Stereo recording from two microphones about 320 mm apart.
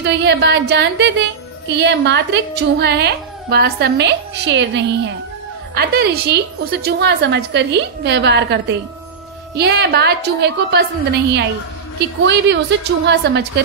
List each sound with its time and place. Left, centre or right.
0.0 s a woman's voice: right